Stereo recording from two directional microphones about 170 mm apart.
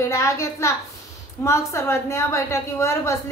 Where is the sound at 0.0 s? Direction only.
15° left (ahead or behind).